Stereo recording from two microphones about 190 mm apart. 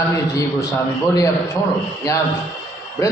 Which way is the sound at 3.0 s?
15° left (ahead or behind).